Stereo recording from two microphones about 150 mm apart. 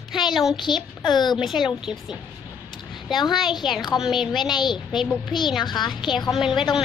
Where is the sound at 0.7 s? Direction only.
30° left (ahead or behind).